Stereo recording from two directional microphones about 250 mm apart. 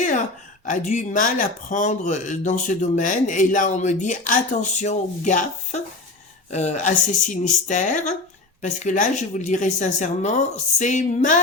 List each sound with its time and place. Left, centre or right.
0.6 s speech: left